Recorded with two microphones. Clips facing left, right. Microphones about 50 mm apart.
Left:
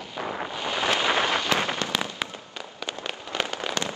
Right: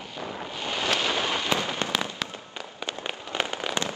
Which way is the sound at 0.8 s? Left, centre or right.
Left.